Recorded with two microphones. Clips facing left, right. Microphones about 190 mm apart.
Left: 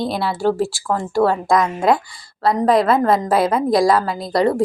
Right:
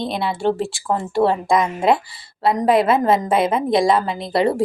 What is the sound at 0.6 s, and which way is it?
Speech, centre (ahead or behind).